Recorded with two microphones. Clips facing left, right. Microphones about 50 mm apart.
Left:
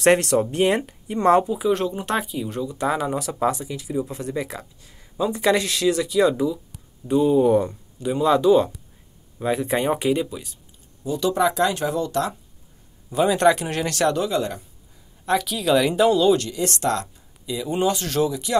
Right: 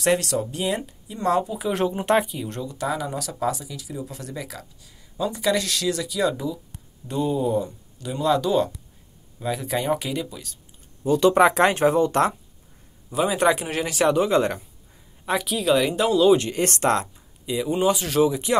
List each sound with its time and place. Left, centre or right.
0.0 s speech: left
2.0 s speech: centre
2.7 s speech: left
6.3 s speech: centre
7.4 s speech: left
8.0 s speech: left
11.1 s speech: right
13.1 s speech: centre
14.2 s speech: right
15.2 s speech: centre
16.5 s speech: right
17.6 s speech: centre
18.3 s speech: right